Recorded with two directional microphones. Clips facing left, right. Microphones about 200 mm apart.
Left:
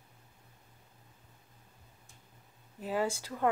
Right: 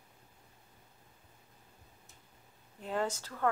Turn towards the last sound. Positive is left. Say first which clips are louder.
# left 2 dB
turn(degrees=15)  # may be behind; listen again after turning